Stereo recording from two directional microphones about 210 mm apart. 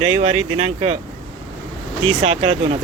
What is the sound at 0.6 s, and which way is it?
Speech, 30° right (ahead or behind).